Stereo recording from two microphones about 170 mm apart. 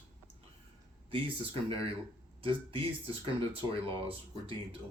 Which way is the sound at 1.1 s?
30° right (ahead or behind).